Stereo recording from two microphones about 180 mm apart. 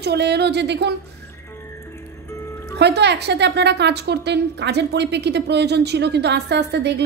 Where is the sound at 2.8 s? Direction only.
70° right (ahead or behind).